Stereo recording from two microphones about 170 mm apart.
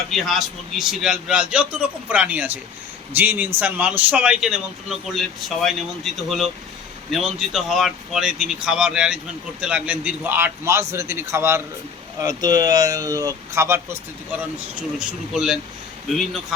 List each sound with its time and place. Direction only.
0.1 s a man's voice: centre (ahead or behind)
14.9 s a man's voice: 5° right (ahead or behind)